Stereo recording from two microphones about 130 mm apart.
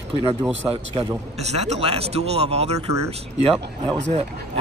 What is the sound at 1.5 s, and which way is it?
Speech, 55° right (ahead or behind).